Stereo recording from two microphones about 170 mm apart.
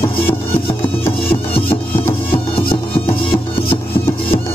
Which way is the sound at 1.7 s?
30° left (ahead or behind).